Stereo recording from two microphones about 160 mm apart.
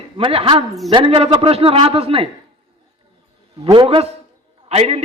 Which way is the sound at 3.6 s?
35° right (ahead or behind).